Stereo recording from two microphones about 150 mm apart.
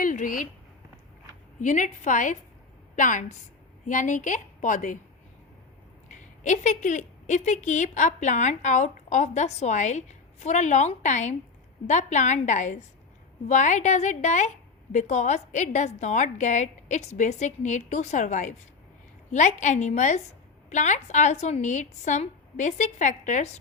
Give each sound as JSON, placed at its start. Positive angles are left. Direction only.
{"t": 0.0, "sound": "a sound", "side_deg": 60}
{"t": 1.6, "sound": "a woman's voice", "side_deg": 55}
{"t": 6.1, "sound": "a woman's voice", "side_deg": 55}